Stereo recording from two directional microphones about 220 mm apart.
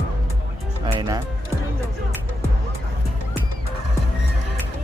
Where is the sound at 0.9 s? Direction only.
15° right (ahead or behind).